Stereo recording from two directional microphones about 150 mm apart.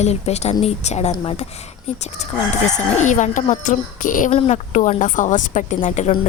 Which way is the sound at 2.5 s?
50° left (ahead or behind).